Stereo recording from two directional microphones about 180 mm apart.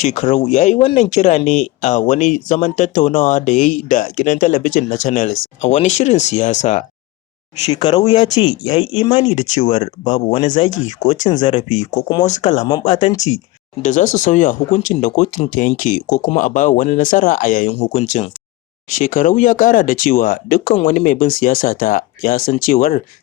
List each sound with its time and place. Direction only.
0.0 s speech: 40° left (ahead or behind)
7.8 s speech: 25° left (ahead or behind)
9.2 s speech: 45° left (ahead or behind)
17.7 s speech: 30° left (ahead or behind)
18.0 s speech: 45° left (ahead or behind)